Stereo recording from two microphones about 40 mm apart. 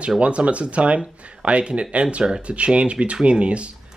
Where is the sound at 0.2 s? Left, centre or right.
Right.